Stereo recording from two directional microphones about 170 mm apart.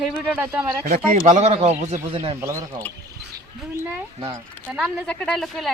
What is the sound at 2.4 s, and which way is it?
Speech, 15° right (ahead or behind).